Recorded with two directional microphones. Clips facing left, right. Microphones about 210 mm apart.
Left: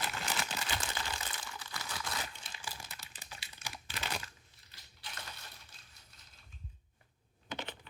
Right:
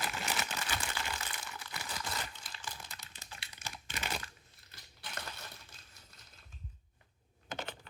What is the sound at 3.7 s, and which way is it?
Computer keyboard, 5° left (ahead or behind).